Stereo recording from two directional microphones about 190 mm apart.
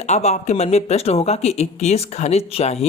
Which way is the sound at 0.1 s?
35° left (ahead or behind).